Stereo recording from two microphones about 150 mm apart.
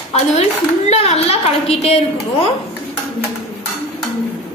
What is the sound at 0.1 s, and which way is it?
A woman's voice, 45° left (ahead or behind).